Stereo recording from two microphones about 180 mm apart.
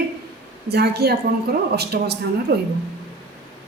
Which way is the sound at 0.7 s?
60° right (ahead or behind).